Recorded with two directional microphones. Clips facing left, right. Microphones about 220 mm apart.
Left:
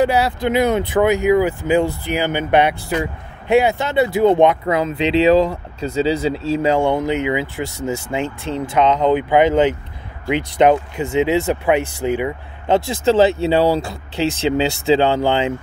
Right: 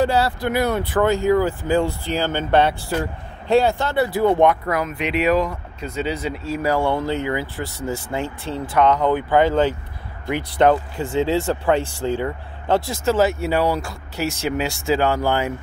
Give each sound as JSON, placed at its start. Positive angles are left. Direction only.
{"t": 0.0, "sound": "speech", "side_deg": 15}